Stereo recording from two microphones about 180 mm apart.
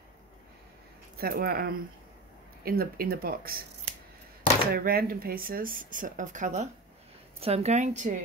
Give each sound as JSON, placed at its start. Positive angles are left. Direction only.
{"t": 1.1, "sound": "speech", "side_deg": -55}
{"t": 4.7, "sound": "a woman's voice", "side_deg": -55}